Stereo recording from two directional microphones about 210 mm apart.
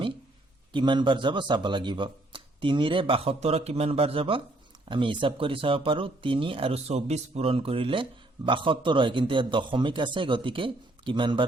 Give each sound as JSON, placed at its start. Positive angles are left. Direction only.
{"t": 0.7, "sound": "speech", "side_deg": -20}